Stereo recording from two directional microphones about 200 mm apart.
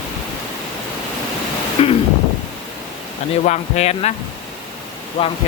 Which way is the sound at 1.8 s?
30° left (ahead or behind).